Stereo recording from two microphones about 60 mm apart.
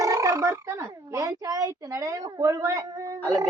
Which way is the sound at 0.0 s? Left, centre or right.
Right.